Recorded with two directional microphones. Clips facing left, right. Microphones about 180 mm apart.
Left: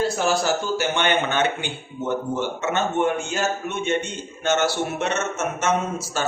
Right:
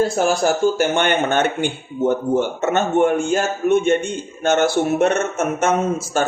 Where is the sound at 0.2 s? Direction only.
50° right (ahead or behind).